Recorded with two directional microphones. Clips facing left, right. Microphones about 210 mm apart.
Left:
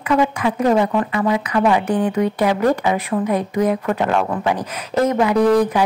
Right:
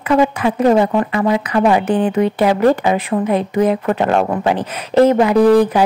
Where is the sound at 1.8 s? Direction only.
25° right (ahead or behind).